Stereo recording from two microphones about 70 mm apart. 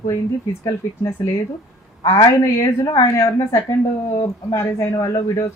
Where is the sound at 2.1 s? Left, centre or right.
Left.